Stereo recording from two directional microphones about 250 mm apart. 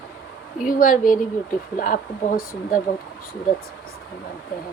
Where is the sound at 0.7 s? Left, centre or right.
Left.